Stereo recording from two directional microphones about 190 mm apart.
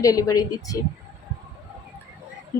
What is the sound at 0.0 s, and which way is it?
Speech, 20° left (ahead or behind).